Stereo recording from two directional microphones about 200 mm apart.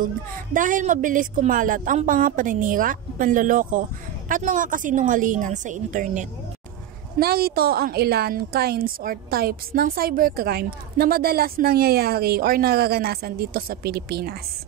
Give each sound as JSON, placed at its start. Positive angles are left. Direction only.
{"t": 0.0, "sound": "speech", "side_deg": -40}
{"t": 7.2, "sound": "a woman's voice", "side_deg": -50}